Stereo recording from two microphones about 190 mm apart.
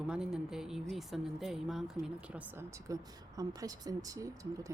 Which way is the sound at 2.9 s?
20° right (ahead or behind).